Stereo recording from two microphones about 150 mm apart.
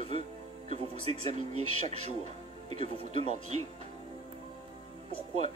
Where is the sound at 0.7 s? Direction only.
45° right (ahead or behind).